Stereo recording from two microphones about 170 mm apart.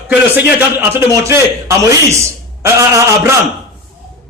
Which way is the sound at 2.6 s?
15° right (ahead or behind).